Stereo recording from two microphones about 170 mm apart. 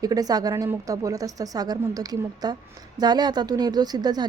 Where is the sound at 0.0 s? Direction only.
20° right (ahead or behind).